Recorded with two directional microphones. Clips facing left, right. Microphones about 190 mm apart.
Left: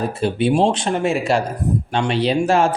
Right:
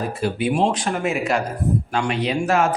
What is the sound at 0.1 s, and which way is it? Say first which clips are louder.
A man's voice: left 4 dB; 25° left (ahead or behind).